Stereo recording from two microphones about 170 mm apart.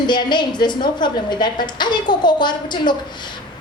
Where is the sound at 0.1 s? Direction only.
25° left (ahead or behind).